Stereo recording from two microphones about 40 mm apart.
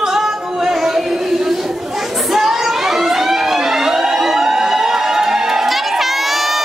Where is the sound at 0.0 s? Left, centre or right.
Centre.